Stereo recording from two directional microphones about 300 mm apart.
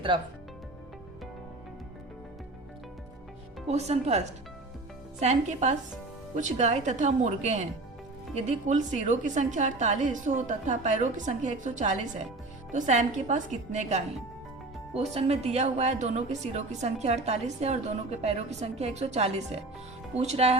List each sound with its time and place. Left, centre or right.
3.7 s speech: right
5.2 s speech: right